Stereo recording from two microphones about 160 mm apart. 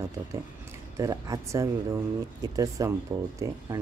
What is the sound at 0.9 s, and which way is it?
Speech, 20° right (ahead or behind).